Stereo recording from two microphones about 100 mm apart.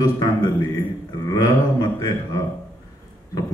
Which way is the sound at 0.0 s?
45° left (ahead or behind).